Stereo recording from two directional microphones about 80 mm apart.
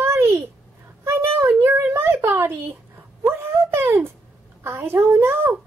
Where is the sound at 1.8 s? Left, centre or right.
Right.